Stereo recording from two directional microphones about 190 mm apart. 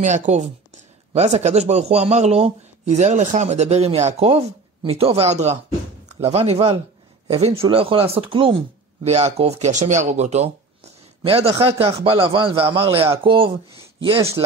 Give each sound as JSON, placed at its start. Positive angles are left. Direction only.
{"t": 0.0, "sound": "a man's voice", "side_deg": -40}